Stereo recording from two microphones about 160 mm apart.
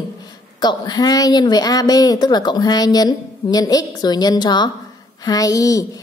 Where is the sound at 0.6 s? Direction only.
25° left (ahead or behind).